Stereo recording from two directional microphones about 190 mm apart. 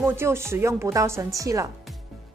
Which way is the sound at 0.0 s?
15° right (ahead or behind).